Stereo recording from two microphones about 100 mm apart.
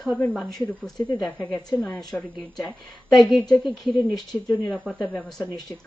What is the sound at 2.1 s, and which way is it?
Speech, 20° left (ahead or behind).